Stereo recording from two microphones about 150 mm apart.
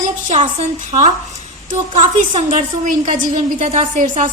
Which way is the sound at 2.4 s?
50° right (ahead or behind).